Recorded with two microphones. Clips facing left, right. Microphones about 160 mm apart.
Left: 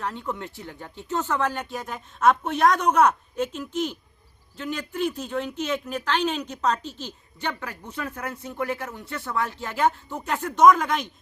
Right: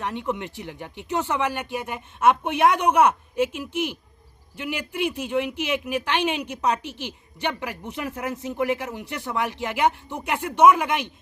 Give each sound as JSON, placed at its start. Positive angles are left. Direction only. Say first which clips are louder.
{"t": 0.0, "sound": "speech", "louder": "right 3 dB", "side_deg": -20}